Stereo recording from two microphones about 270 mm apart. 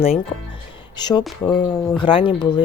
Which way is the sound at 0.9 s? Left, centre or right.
Centre.